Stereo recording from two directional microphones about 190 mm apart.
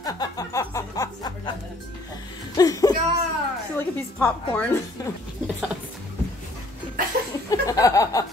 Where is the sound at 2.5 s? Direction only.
20° left (ahead or behind).